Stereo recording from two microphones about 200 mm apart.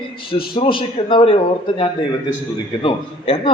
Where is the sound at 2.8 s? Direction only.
25° left (ahead or behind).